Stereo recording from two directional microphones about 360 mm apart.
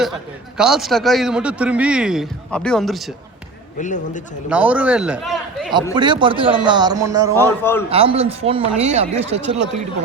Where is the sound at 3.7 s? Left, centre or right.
Left.